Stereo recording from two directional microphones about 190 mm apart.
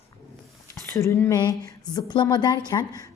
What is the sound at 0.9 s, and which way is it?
A woman's voice, 15° left (ahead or behind).